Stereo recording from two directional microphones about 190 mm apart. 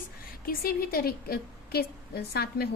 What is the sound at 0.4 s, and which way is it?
A woman's voice, 50° left (ahead or behind).